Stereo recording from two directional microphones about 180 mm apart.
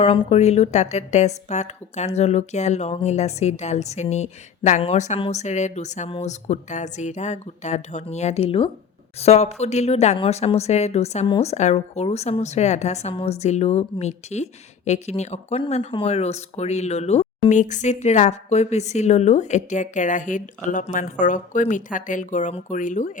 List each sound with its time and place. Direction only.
0.0 s speech: 35° left (ahead or behind)